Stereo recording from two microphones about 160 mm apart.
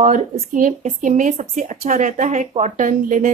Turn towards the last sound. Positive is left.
turn(degrees=-55)  # may be behind; listen again after turning